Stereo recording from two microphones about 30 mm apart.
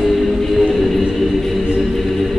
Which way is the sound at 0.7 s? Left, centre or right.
Centre.